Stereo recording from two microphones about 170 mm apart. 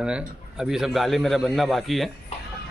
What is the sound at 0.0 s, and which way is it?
A man's voice, 5° right (ahead or behind).